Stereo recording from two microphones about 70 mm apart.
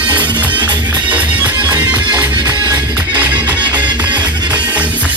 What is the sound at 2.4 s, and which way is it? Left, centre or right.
Music, right.